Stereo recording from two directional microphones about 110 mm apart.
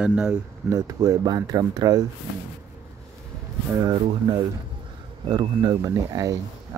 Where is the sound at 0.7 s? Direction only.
30° right (ahead or behind).